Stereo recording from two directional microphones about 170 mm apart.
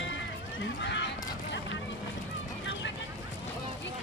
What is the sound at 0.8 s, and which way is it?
Horse, 90° left.